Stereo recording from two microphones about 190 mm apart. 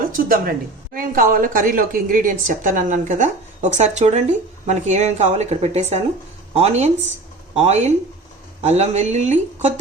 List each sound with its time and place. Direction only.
0.0 s a woman's voice: 50° right (ahead or behind)